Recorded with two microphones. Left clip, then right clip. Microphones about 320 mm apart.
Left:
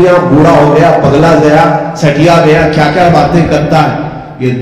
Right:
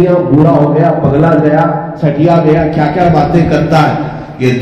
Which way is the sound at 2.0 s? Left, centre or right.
Left.